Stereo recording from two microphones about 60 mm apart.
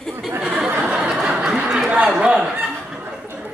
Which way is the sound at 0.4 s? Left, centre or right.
Centre.